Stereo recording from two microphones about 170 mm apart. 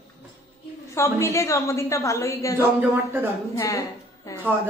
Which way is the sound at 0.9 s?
15° left (ahead or behind).